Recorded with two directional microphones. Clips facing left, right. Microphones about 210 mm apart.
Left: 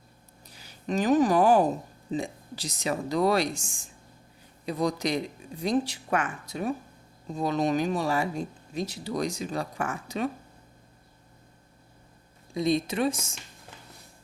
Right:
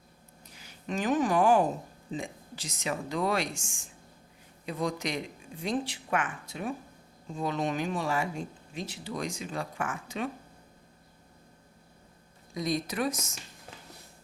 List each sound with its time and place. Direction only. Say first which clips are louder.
0.4 s speech: left 5 dB; 35° left (ahead or behind)
12.5 s speech: left 5 dB; 25° left (ahead or behind)